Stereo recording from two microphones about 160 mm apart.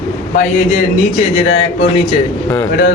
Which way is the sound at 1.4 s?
40° left (ahead or behind).